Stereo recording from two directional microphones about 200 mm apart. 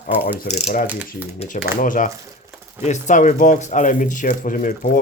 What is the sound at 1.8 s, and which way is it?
Speech, 40° left (ahead or behind).